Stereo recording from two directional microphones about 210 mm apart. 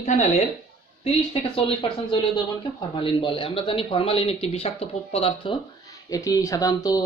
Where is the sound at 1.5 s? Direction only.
25° left (ahead or behind).